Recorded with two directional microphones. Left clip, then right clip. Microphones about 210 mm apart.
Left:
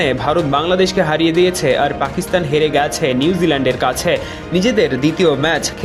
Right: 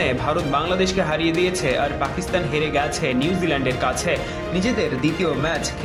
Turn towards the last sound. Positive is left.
turn(degrees=35)  # may be behind; listen again after turning